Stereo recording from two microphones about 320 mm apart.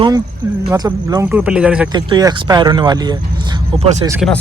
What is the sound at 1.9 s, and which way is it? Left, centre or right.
Speech, centre.